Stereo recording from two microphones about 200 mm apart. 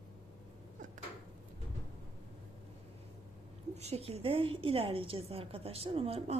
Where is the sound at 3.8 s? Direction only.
30° right (ahead or behind).